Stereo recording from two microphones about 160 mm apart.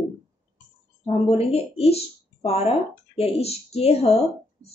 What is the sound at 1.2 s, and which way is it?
A woman's voice, 40° left (ahead or behind).